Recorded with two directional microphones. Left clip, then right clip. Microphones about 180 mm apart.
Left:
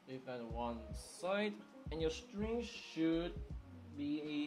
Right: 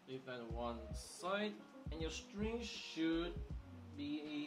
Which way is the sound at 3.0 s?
40° left (ahead or behind).